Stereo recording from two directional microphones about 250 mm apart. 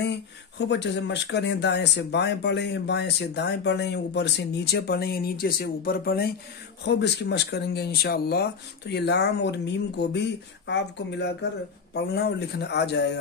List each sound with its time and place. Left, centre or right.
0.0 s speech: left